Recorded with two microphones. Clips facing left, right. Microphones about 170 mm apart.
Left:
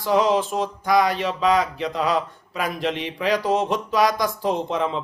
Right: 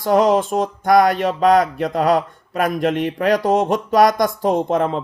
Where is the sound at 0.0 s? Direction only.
50° right (ahead or behind).